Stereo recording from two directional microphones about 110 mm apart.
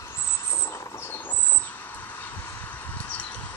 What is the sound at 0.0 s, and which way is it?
Bird, 25° left (ahead or behind).